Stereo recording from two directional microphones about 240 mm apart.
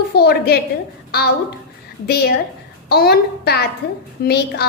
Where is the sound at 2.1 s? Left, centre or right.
Left.